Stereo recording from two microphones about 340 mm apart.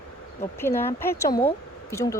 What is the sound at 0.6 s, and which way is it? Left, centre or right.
Speech, centre.